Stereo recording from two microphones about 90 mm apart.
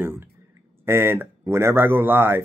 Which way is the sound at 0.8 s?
25° right (ahead or behind).